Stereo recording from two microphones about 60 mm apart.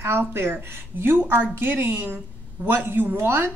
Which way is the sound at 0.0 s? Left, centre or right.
Right.